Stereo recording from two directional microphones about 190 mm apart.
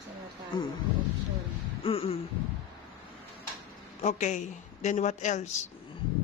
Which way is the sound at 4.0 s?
40° left (ahead or behind).